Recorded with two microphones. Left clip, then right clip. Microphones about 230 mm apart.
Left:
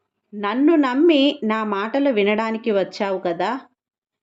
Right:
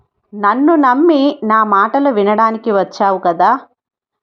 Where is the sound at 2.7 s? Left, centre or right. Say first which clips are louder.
Right 8 dB; centre.